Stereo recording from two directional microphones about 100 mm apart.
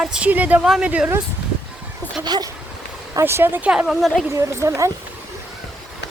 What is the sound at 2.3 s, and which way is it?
Speech, 40° right (ahead or behind).